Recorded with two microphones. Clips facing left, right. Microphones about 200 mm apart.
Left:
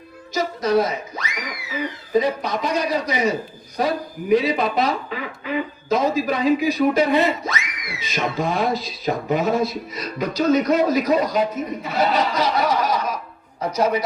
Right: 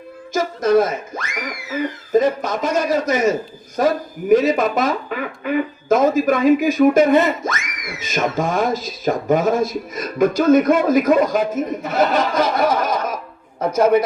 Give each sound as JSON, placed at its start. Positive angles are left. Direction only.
{"t": 0.3, "sound": "speech", "side_deg": -50}